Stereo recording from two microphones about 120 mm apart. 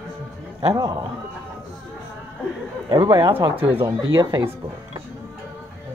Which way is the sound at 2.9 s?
50° right (ahead or behind).